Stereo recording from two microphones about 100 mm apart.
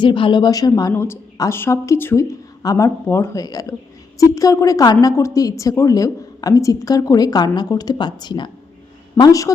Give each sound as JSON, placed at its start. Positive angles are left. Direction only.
{"t": 0.0, "sound": "speech", "side_deg": 55}
{"t": 0.9, "sound": "a woman's voice", "side_deg": 25}